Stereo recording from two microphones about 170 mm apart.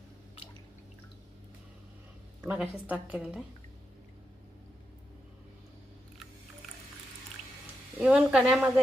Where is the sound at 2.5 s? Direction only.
10° right (ahead or behind).